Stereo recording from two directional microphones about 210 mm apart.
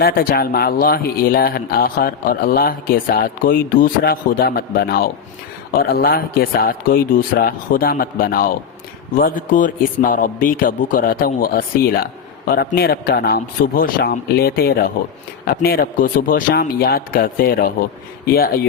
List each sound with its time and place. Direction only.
0.0 s a man's voice: 45° left (ahead or behind)